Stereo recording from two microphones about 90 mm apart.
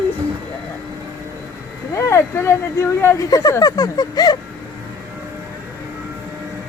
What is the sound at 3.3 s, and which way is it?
Speech, 40° left (ahead or behind).